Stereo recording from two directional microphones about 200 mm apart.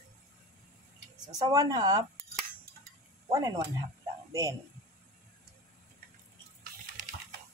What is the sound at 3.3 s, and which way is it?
Speech, 20° right (ahead or behind).